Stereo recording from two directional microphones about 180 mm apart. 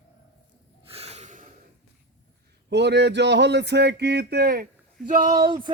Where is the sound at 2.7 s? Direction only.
70° right (ahead or behind); by 5.4 s 50° right (ahead or behind).